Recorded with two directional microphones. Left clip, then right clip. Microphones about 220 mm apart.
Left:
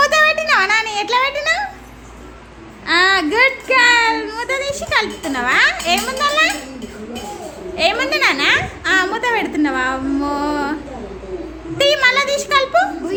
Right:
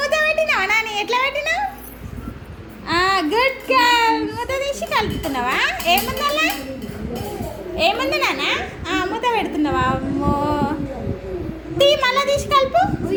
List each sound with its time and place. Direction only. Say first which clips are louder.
0.0 s a sound: left 4 dB; 20° left (ahead or behind)
2.8 s a child's voice: left 4 dB; 15° left (ahead or behind)
7.8 s a woman's voice: left 3 dB; 20° left (ahead or behind)
11.8 s a woman's voice: left 2 dB; 20° left (ahead or behind)